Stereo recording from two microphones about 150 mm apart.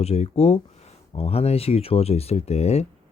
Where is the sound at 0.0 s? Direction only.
45° left (ahead or behind).